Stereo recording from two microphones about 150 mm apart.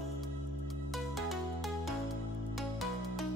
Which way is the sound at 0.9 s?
Centre (ahead or behind).